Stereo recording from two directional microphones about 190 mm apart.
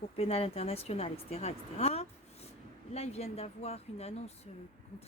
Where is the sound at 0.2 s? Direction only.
30° left (ahead or behind).